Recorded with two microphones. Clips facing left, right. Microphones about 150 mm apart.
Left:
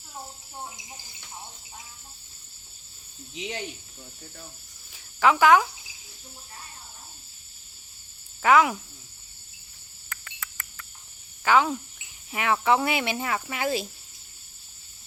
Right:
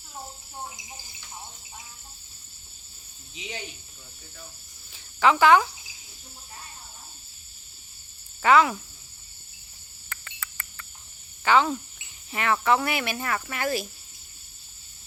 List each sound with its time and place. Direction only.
3.3 s speech: 65° left (ahead or behind)
4.9 s cricket: 5° left (ahead or behind)
8.4 s speech: 5° left (ahead or behind)
10.1 s frog: 5° right (ahead or behind)
11.4 s speech: 5° left (ahead or behind)